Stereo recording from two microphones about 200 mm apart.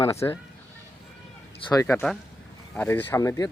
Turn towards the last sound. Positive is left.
turn(degrees=15)  # may be behind; listen again after turning